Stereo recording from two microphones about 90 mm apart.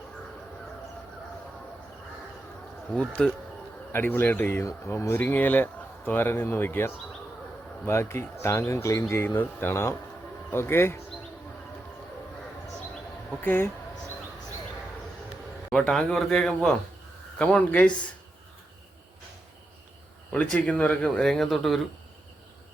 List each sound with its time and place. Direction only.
3.2 s speech: 10° left (ahead or behind)
3.9 s speech: 25° left (ahead or behind)
13.4 s speech: 25° left (ahead or behind)
15.7 s speech: 10° left (ahead or behind)
20.3 s speech: 15° left (ahead or behind)